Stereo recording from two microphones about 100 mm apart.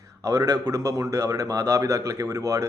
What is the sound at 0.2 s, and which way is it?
Speech, 35° right (ahead or behind).